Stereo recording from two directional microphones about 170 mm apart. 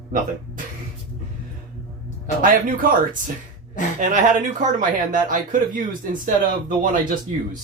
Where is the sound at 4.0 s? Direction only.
50° right (ahead or behind).